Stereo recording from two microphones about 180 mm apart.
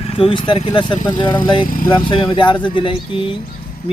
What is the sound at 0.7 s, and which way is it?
Speech, 25° left (ahead or behind).